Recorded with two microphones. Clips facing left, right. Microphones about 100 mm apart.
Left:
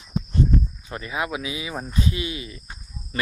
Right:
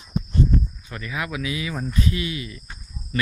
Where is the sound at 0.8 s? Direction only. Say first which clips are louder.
Left 2 dB; 25° left (ahead or behind).